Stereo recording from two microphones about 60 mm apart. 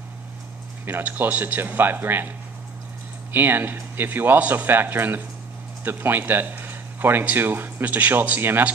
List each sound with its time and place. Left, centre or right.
0.8 s speech: right